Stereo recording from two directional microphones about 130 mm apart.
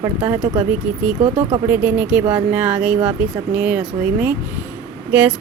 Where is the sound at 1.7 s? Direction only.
15° right (ahead or behind).